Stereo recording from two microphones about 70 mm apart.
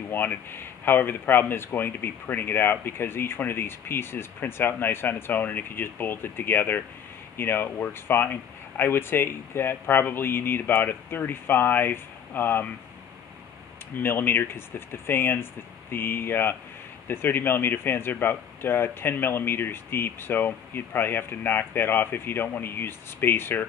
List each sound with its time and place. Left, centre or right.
0.1 s speech: left
13.9 s speech: left